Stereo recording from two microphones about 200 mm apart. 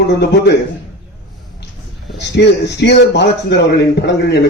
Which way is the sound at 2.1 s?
60° left (ahead or behind).